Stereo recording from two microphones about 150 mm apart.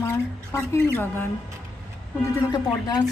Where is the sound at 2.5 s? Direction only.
25° left (ahead or behind).